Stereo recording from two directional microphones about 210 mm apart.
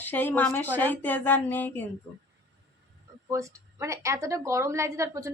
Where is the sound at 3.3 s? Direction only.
15° right (ahead or behind).